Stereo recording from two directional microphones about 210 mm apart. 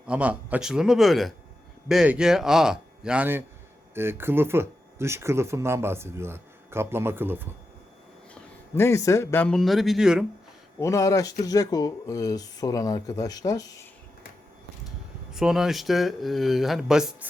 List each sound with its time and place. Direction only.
0.1 s speech: 5° right (ahead or behind)
8.4 s a man's voice: 10° left (ahead or behind)
10.8 s speech: 15° left (ahead or behind)
15.3 s speech: centre (ahead or behind)